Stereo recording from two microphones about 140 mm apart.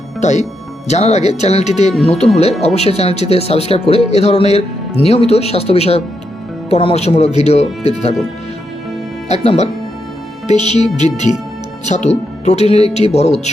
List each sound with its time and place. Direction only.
0.2 s speech: 55° left (ahead or behind)
9.3 s a woman's voice: 50° left (ahead or behind)